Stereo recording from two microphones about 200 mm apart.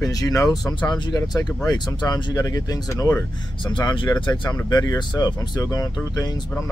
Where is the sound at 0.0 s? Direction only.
15° left (ahead or behind).